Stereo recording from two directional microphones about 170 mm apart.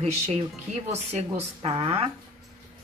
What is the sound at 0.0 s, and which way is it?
A woman's voice, 40° right (ahead or behind).